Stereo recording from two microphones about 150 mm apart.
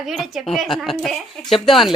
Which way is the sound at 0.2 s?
Centre (ahead or behind).